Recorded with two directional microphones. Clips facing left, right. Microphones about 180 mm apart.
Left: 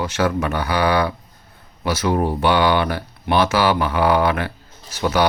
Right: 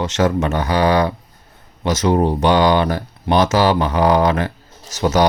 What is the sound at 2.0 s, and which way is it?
Speech, 20° right (ahead or behind).